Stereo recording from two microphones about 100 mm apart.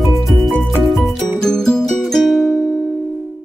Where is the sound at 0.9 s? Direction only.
Centre (ahead or behind).